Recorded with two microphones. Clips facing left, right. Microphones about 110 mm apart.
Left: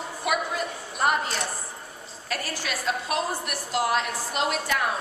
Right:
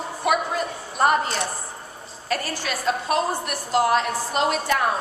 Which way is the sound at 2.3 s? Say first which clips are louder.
Right 5 dB; 5° left (ahead or behind).